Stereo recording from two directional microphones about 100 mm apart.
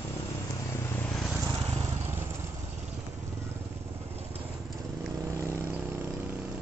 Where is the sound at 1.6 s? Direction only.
85° right.